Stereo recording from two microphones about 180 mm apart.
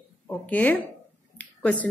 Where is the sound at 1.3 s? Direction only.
5° left (ahead or behind).